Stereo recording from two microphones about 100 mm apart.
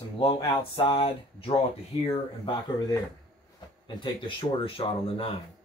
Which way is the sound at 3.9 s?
55° left (ahead or behind).